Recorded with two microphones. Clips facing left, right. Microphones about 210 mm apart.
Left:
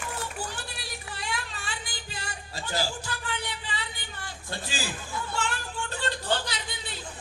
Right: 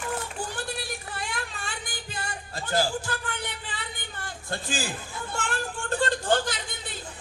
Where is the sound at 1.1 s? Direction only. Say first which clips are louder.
Right 1 dB; 50° right (ahead or behind).